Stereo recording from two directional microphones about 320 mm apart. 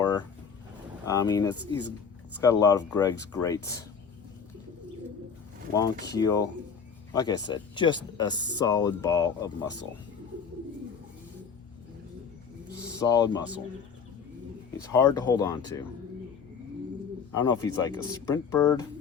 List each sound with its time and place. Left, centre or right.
0.0 s a sound: centre
1.0 s speech: centre
5.7 s speech: centre
13.1 s speech: centre
14.8 s speech: centre
17.3 s speech: centre